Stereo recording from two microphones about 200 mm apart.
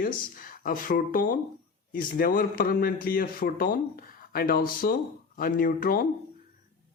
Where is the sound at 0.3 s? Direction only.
45° left (ahead or behind).